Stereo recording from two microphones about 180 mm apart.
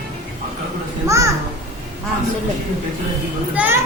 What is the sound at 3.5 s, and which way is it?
Speech, 10° right (ahead or behind).